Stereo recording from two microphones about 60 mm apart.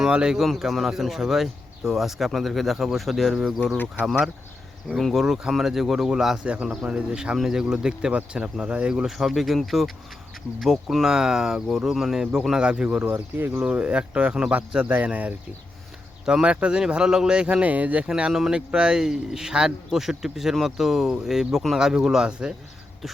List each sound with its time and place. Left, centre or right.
0.0 s speech: centre
0.3 s speech: centre
4.9 s speech: centre
14.8 s speech: right
16.2 s speech: centre
18.1 s speech: centre